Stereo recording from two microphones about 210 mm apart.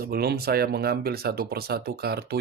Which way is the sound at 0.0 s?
45° right (ahead or behind).